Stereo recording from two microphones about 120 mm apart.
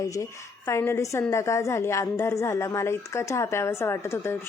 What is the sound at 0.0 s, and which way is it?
A woman's voice, 25° left (ahead or behind).